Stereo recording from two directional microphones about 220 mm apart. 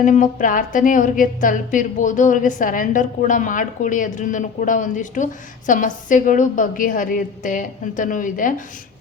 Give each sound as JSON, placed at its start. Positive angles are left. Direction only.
{"t": 0.0, "sound": "speech", "side_deg": 35}